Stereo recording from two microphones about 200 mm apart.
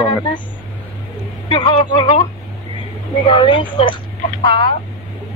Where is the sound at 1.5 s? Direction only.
25° left (ahead or behind).